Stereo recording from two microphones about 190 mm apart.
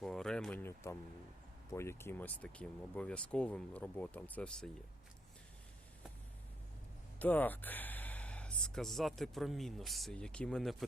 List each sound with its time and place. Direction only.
0.0 s a sound: 5° left (ahead or behind)
1.7 s speech: 15° left (ahead or behind)
7.2 s speech: 10° left (ahead or behind)